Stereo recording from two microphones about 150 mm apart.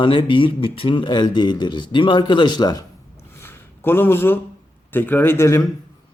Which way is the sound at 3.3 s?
15° left (ahead or behind).